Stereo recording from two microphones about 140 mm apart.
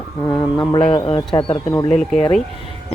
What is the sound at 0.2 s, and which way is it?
Speech, 30° left (ahead or behind).